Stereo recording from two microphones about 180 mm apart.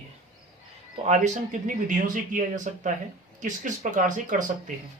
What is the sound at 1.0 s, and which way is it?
Speech, 40° right (ahead or behind).